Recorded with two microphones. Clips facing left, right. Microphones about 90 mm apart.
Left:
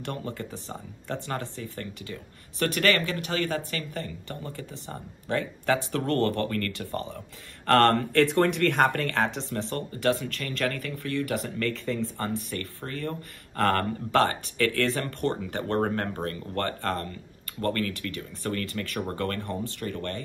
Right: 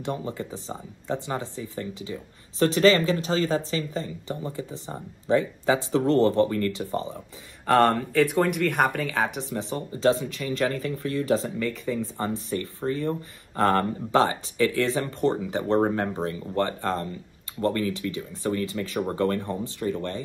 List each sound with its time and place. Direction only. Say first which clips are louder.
0.0 s speech: right 4 dB; 15° right (ahead or behind)